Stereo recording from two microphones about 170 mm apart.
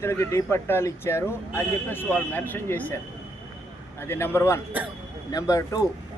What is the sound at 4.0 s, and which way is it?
A man's voice, 15° left (ahead or behind).